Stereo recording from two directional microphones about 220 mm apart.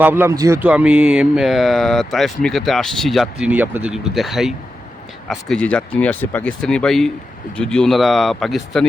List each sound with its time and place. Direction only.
0.0 s speech: 10° right (ahead or behind)